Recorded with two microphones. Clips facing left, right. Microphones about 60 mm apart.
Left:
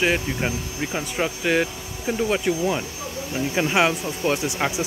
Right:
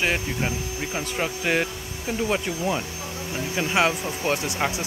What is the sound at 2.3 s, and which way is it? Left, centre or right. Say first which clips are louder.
Speech: left 3 dB; centre.